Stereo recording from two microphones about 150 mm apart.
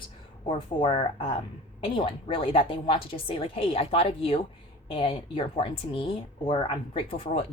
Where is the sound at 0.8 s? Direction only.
35° left (ahead or behind).